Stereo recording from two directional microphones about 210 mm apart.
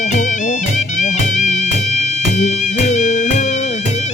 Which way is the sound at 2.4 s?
35° left (ahead or behind).